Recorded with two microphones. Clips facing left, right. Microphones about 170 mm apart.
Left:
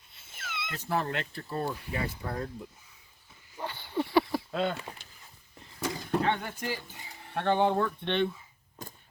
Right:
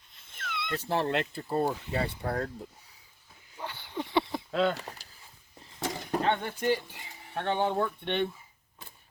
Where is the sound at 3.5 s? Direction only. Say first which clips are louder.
Left 4 dB; 10° left (ahead or behind).